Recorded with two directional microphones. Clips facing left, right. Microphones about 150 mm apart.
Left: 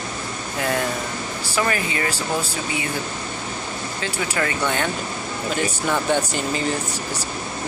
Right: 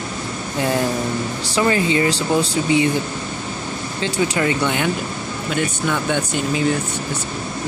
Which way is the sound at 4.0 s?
20° right (ahead or behind).